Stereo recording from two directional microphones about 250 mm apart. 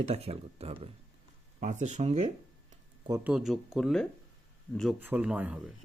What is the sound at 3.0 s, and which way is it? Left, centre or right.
Speech, centre.